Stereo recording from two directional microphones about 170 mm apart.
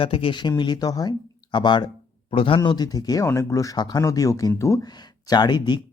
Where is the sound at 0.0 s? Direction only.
30° left (ahead or behind).